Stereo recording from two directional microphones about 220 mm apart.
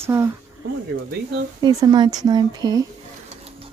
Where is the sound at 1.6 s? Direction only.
20° right (ahead or behind).